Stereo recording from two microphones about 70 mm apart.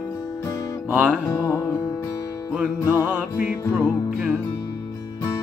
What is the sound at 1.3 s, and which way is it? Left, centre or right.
Music, left.